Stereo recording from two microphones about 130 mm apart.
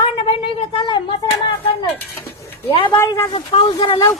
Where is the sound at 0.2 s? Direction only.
45° left (ahead or behind).